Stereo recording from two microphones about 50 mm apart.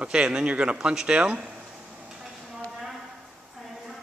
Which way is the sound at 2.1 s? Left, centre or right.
Centre.